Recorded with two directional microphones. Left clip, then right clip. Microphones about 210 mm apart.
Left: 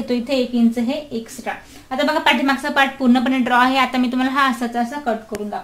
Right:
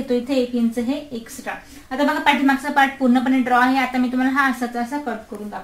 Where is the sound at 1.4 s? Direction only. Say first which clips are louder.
Left 3 dB; 40° left (ahead or behind).